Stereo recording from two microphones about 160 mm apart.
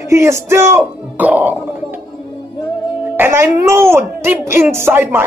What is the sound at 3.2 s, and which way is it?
A man's voice, 15° right (ahead or behind).